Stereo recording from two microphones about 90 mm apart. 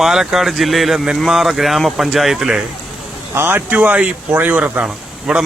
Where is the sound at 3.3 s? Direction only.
25° right (ahead or behind).